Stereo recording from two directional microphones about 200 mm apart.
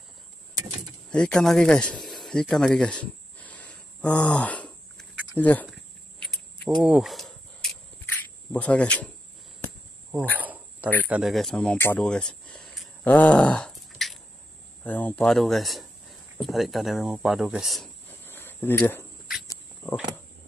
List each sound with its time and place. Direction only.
1.1 s a sound: 5° left (ahead or behind)
6.8 s cricket: centre (ahead or behind)
8.2 s speech: 5° left (ahead or behind)
10.4 s cricket: 10° right (ahead or behind)
11.1 s speech: 5° right (ahead or behind)
18.2 s a sound: 10° left (ahead or behind)